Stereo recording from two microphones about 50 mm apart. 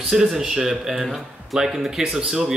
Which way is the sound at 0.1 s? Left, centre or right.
Centre.